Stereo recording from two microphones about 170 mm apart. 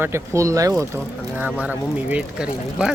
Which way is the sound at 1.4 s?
5° right (ahead or behind).